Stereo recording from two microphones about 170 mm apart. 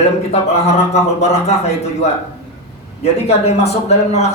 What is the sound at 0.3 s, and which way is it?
A man's voice, 40° left (ahead or behind).